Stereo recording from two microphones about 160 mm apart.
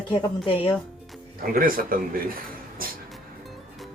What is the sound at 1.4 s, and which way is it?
Speech, 65° right (ahead or behind).